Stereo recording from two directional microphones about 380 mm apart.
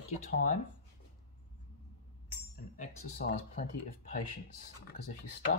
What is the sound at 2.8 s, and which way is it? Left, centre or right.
Speech, centre.